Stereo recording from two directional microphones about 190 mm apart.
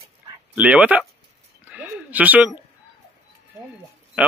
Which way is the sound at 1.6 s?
10° right (ahead or behind).